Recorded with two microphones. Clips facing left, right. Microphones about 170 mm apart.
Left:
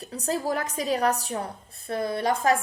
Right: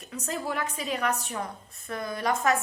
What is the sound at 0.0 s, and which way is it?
A woman's voice, 35° left (ahead or behind).